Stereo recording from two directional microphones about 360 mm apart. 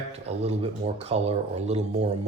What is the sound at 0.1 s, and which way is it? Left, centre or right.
Speech, centre.